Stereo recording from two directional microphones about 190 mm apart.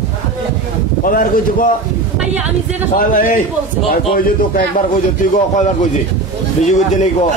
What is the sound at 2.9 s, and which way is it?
Speech, 45° left (ahead or behind).